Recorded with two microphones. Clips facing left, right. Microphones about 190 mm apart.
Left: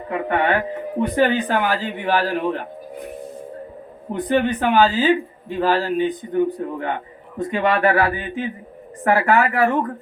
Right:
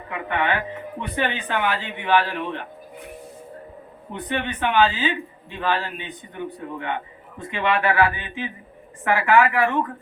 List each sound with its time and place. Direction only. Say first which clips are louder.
0.1 s a man's voice: left 5 dB; 40° left (ahead or behind)
4.1 s a man's voice: left 8 dB; 40° left (ahead or behind)